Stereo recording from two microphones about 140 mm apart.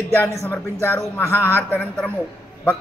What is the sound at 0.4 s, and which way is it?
A man's voice, 15° left (ahead or behind).